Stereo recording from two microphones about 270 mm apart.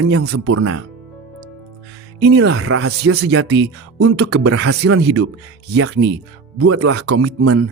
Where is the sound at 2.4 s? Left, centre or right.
Right.